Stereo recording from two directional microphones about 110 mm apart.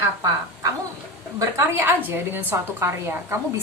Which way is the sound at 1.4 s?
20° right (ahead or behind).